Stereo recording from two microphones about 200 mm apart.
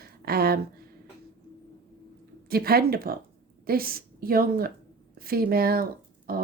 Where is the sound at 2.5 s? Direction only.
50° right (ahead or behind).